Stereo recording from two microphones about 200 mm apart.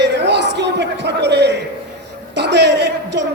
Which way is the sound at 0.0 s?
55° right (ahead or behind).